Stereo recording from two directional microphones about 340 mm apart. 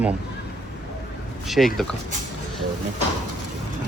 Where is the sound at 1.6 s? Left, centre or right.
Centre.